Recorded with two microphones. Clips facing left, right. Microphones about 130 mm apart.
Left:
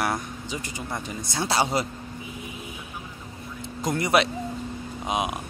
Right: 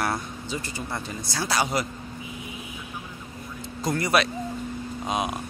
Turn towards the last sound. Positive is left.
turn(degrees=15)  # may be behind; listen again after turning